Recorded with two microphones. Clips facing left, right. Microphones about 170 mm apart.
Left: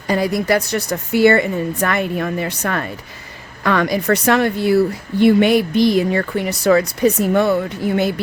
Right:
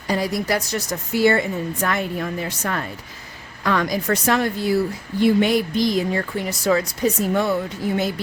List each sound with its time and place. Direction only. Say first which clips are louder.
0.1 s a woman's voice: left 5 dB; 60° left (ahead or behind)